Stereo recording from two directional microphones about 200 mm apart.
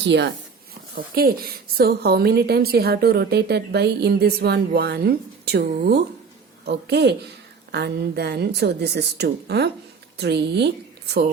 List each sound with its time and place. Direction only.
0.0 s speech: 60° right (ahead or behind)
0.9 s a woman's voice: 50° right (ahead or behind)